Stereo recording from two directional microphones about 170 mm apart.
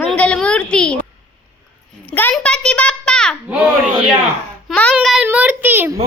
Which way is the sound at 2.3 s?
5° left (ahead or behind).